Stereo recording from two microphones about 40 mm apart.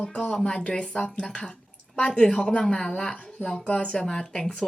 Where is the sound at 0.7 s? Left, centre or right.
Left.